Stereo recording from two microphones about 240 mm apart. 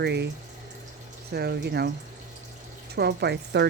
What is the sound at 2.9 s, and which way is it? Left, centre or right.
Speech, right.